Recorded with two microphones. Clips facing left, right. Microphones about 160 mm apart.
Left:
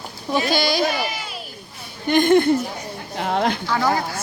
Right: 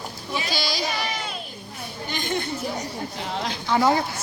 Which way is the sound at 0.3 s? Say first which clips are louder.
Left 8 dB; 55° left (ahead or behind).